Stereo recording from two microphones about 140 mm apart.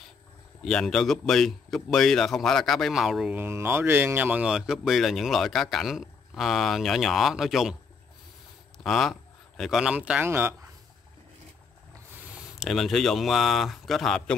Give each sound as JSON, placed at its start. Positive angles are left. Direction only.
{"t": 0.6, "sound": "speech", "side_deg": 0}
{"t": 3.3, "sound": "speech", "side_deg": -15}
{"t": 8.7, "sound": "speech", "side_deg": 0}
{"t": 12.5, "sound": "speech", "side_deg": 0}